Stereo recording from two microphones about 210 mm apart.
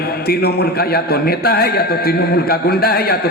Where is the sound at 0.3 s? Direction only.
50° left (ahead or behind).